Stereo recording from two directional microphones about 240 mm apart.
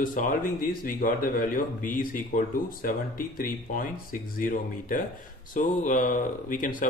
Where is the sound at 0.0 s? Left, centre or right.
Left.